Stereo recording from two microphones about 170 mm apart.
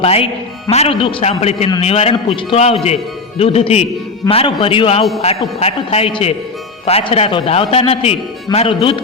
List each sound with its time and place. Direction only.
0.0 s a man's voice: 35° left (ahead or behind)